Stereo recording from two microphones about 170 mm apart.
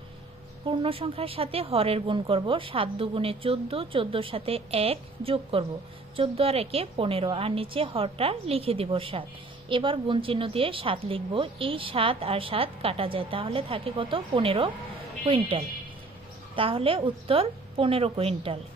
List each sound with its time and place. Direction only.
0.7 s a woman's voice: 30° right (ahead or behind)